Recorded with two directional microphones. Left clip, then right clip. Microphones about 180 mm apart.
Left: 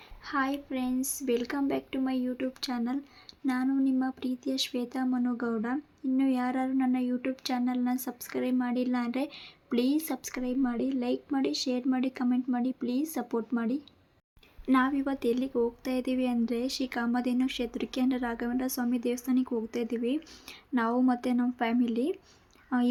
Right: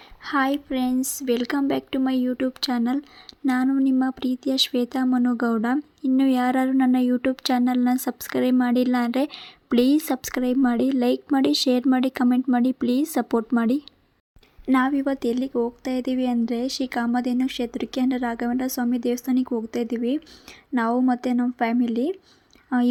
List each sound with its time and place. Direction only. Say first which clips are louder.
0.3 s speech: right 8 dB; 45° right (ahead or behind)
14.7 s a woman's voice: right 6 dB; 35° right (ahead or behind)